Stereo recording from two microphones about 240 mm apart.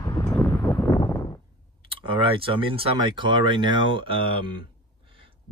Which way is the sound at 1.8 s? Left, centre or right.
Right.